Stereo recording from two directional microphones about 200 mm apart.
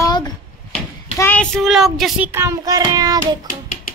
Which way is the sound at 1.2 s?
10° left (ahead or behind).